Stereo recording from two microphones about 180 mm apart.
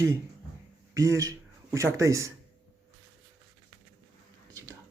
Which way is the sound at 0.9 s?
20° right (ahead or behind).